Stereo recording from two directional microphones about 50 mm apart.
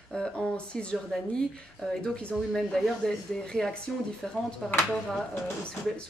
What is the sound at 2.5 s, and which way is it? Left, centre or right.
A woman's voice, centre.